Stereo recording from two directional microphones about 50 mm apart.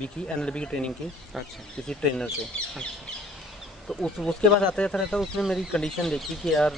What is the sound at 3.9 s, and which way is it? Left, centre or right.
Speech, centre.